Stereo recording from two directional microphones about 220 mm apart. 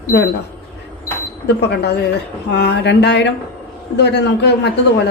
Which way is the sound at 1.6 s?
50° left (ahead or behind).